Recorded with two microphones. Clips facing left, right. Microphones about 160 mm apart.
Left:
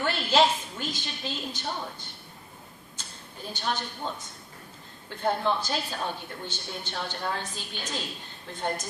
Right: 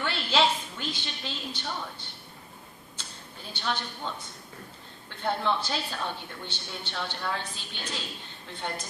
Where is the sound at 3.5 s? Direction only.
45° left (ahead or behind).